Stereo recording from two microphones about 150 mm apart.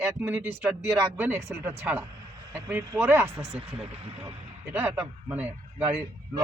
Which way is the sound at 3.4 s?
45° right (ahead or behind).